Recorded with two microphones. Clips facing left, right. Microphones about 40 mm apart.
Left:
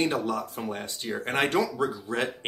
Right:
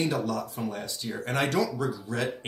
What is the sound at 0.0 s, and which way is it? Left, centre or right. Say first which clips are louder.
Speech: left 1 dB; left.